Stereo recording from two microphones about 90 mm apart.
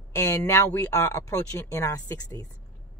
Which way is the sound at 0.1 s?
35° left (ahead or behind).